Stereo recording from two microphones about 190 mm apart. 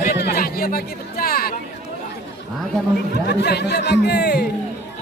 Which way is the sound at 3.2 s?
60° left (ahead or behind).